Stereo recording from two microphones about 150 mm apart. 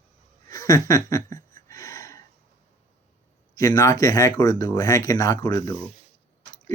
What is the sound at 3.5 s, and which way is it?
A man's voice, 20° left (ahead or behind).